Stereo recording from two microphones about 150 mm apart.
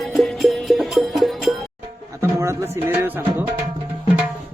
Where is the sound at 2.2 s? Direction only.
20° right (ahead or behind).